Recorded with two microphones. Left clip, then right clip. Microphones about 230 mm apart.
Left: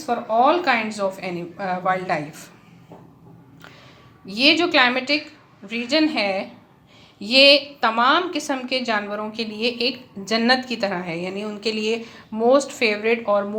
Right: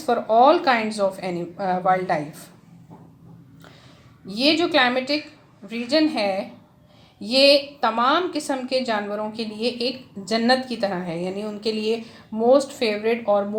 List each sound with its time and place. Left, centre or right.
0.0 s a woman's voice: centre
4.3 s a woman's voice: centre